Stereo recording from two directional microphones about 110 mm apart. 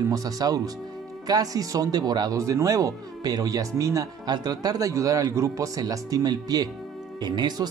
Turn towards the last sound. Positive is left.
turn(degrees=-40)  # may be behind; listen again after turning